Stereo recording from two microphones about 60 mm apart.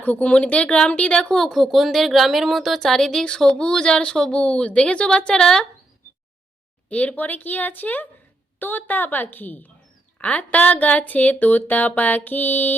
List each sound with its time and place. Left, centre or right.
0.0 s speech: left
1.4 s a woman's voice: centre
6.9 s a woman's voice: left